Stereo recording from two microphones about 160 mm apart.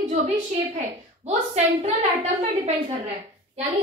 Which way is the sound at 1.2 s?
45° right (ahead or behind).